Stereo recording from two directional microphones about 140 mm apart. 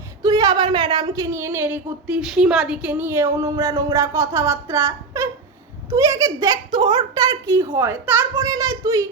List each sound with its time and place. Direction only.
0.2 s a woman's voice: 25° right (ahead or behind)